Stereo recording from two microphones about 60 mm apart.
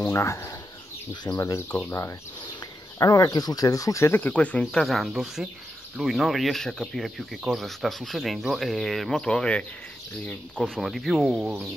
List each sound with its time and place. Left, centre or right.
0.1 s speech: left
3.0 s speech: left
4.1 s speech: left
4.8 s speech: centre
10.6 s speech: centre